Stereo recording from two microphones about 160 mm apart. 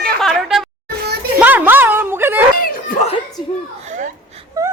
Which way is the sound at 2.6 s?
65° left (ahead or behind).